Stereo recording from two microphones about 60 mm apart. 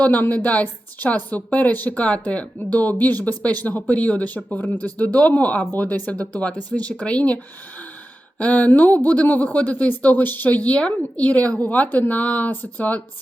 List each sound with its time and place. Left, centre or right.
0.0 s a woman's voice: left
8.4 s a woman's voice: left